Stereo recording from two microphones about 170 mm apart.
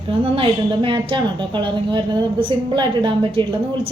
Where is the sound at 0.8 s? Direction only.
30° right (ahead or behind).